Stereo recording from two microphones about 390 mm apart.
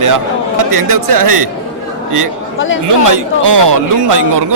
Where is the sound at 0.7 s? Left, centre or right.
Right.